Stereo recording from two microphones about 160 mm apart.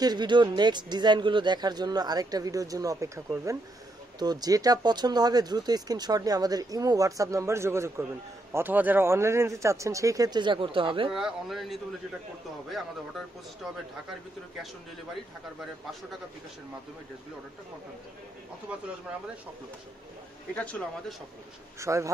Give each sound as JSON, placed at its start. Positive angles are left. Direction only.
{"t": 0.0, "sound": "speech", "side_deg": -25}
{"t": 11.1, "sound": "speech", "side_deg": 0}
{"t": 18.7, "sound": "speech", "side_deg": -10}
{"t": 20.5, "sound": "speech", "side_deg": 10}
{"t": 21.7, "sound": "speech", "side_deg": -20}